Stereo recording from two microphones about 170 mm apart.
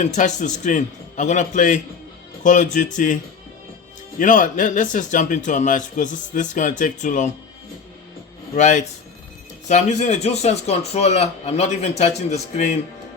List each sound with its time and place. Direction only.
0.0 s speech: 45° left (ahead or behind)
4.2 s speech: 50° left (ahead or behind)
8.5 s a man's voice: 45° left (ahead or behind)